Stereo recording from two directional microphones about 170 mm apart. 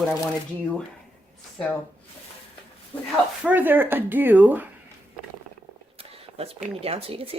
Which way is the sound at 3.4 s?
10° right (ahead or behind).